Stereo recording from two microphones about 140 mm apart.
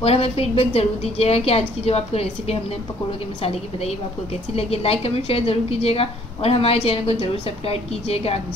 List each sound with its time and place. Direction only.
0.0 s a woman's voice: 45° left (ahead or behind)